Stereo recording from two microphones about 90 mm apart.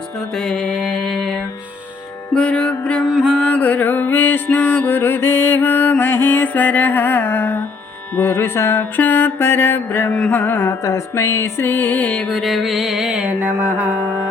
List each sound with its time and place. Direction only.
0.3 s music: 5° left (ahead or behind)
2.3 s mantra: 10° left (ahead or behind)
3.3 s music: 15° left (ahead or behind)
8.1 s mantra: 25° left (ahead or behind)
10.1 s music: 10° left (ahead or behind); by 13.9 s 20° right (ahead or behind)